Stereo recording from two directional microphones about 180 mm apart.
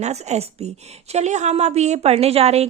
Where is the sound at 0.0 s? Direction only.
40° right (ahead or behind).